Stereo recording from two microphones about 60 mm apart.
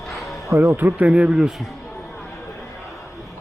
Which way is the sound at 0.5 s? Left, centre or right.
Right.